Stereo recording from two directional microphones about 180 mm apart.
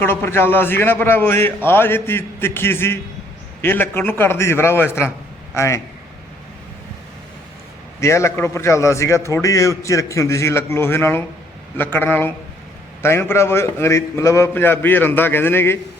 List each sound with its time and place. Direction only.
0.0 s a man's voice: 10° left (ahead or behind)
8.0 s a man's voice: 15° left (ahead or behind)